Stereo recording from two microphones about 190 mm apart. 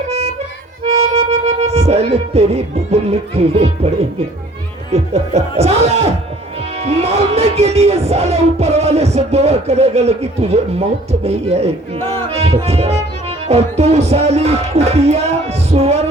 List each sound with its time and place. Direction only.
1.1 s music: 35° right (ahead or behind)
4.9 s speech: 35° right (ahead or behind)
6.7 s music: 35° right (ahead or behind)